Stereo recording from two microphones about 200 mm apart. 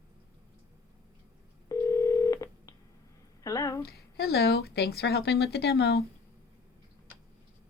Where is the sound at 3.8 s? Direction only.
50° left (ahead or behind).